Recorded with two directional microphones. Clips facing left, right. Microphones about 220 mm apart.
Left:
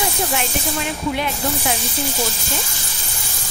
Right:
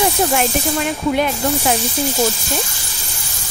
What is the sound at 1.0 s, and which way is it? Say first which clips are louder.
Speech: right 5 dB; 45° right (ahead or behind).